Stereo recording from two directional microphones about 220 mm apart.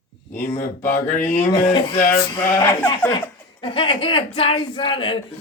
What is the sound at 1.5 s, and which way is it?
Speech, 20° left (ahead or behind).